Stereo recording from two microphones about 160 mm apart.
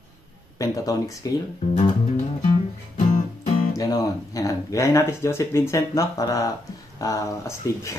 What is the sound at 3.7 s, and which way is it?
Speech, 20° left (ahead or behind).